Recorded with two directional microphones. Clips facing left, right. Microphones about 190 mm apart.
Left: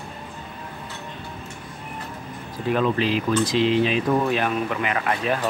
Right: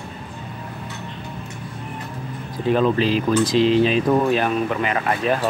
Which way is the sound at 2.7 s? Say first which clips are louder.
Right 3 dB; 35° right (ahead or behind).